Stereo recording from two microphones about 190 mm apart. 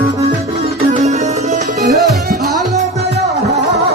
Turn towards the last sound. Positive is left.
turn(degrees=-55)  # may be behind; listen again after turning